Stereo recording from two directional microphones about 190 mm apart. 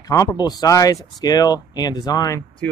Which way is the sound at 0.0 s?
20° left (ahead or behind).